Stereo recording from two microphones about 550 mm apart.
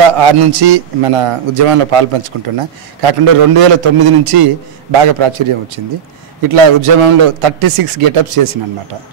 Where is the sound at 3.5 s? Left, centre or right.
Right.